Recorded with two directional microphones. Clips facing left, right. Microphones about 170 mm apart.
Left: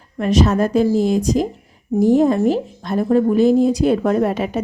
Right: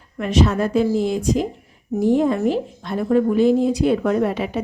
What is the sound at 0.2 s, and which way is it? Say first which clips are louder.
Speech: left 3 dB; 40° left (ahead or behind).